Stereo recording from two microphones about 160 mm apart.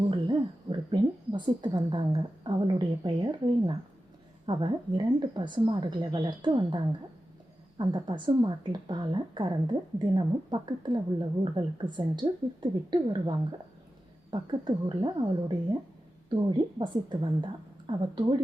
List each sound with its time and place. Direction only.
0.1 s a woman's voice: 30° right (ahead or behind)